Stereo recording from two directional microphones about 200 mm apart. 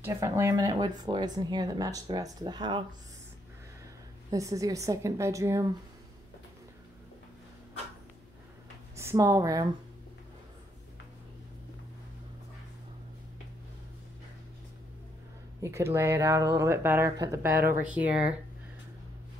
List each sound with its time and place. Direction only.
0.0 s speech: 15° right (ahead or behind)
4.3 s speech: 15° right (ahead or behind)
8.9 s speech: 15° right (ahead or behind)
15.6 s speech: 15° right (ahead or behind)
17.6 s speech: 50° right (ahead or behind)
17.8 s speech: 5° right (ahead or behind)